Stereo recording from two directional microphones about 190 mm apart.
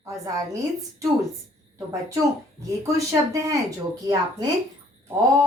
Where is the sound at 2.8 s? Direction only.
15° right (ahead or behind).